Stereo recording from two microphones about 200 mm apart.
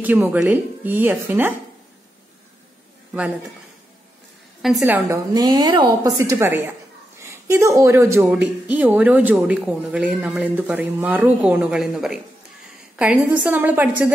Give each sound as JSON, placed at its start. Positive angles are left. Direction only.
{"t": 0.0, "sound": "speech", "side_deg": -10}
{"t": 4.6, "sound": "a woman's voice", "side_deg": 0}
{"t": 5.3, "sound": "speech", "side_deg": -20}